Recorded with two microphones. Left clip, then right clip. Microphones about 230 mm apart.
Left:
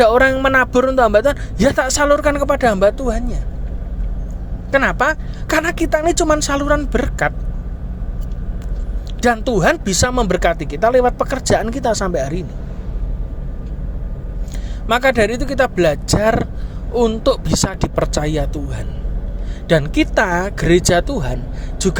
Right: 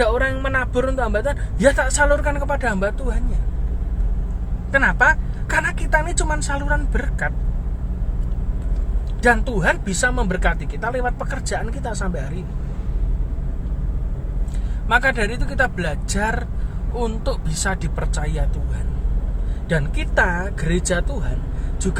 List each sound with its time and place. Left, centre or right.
0.0 s speech: left
4.7 s speech: left
9.2 s speech: left
14.8 s speech: left
19.6 s speech: left